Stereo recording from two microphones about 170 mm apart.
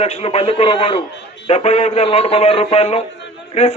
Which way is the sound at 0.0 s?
40° left (ahead or behind).